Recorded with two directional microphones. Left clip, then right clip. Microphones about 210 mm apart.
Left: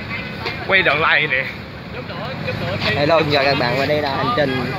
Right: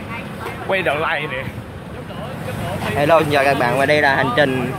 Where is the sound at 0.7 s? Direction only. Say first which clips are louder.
Left 4 dB; 15° right (ahead or behind).